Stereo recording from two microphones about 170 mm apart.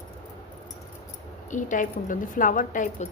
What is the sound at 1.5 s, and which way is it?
A woman's voice, 50° left (ahead or behind).